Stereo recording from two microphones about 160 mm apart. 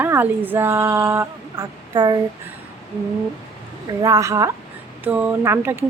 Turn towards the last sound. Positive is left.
turn(degrees=-15)  # may be behind; listen again after turning